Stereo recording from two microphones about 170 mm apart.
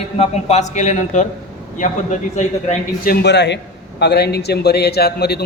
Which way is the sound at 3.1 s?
85° left.